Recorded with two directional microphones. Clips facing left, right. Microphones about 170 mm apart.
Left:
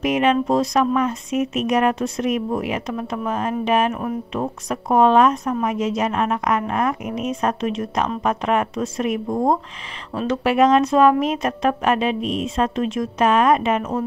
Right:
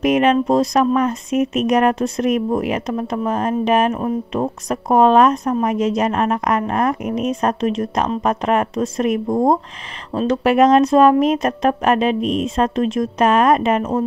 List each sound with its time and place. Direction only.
0.0 s speech: 40° right (ahead or behind)
12.2 s a woman's voice: centre (ahead or behind)
12.4 s speech: 40° right (ahead or behind)